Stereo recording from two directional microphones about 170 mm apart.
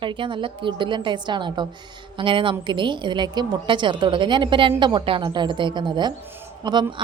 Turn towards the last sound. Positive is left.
turn(degrees=-25)  # may be behind; listen again after turning